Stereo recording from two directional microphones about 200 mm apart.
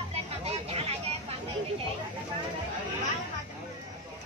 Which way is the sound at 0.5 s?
30° right (ahead or behind).